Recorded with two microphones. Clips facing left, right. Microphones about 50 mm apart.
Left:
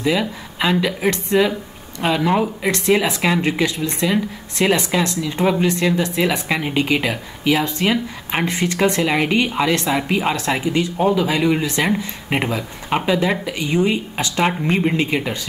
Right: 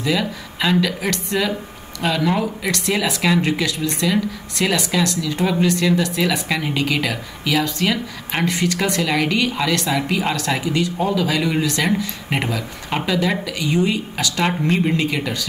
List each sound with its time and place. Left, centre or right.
0.0 s speech: centre